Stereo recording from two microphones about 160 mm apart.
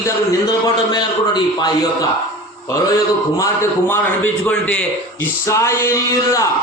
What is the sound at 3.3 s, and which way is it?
A man's voice, 20° left (ahead or behind).